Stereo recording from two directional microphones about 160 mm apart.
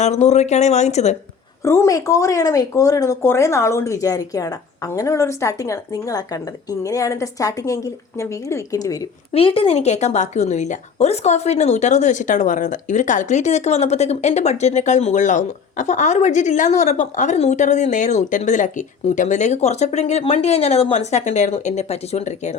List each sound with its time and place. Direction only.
0.0 s a woman's voice: 45° left (ahead or behind)
1.6 s speech: 15° left (ahead or behind)
9.3 s a woman's voice: 35° left (ahead or behind)